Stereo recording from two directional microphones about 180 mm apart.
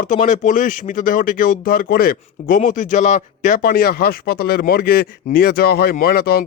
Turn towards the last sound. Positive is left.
turn(degrees=55)  # may be behind; listen again after turning